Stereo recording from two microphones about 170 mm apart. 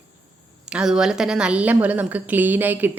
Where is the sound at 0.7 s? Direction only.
5° right (ahead or behind).